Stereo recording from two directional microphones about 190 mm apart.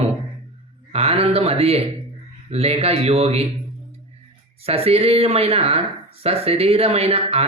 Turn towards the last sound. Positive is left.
turn(degrees=-30)  # may be behind; listen again after turning